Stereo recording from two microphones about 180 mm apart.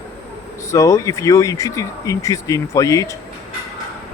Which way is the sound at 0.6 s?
15° left (ahead or behind).